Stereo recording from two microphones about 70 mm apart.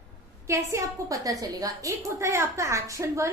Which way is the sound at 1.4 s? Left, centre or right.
Right.